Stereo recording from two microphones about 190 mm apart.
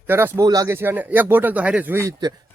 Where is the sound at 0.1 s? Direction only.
10° right (ahead or behind).